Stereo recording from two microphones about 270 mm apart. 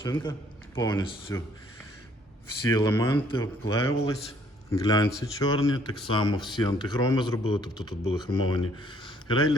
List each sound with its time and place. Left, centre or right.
0.0 s speech: centre
2.6 s speech: centre
9.0 s a sound: centre